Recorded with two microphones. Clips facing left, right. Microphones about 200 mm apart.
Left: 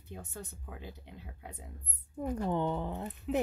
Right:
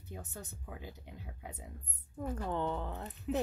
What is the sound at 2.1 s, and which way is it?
Speech, 15° left (ahead or behind).